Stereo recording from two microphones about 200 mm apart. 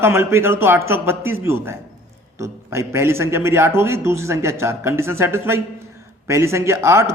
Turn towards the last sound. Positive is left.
turn(degrees=-15)  # may be behind; listen again after turning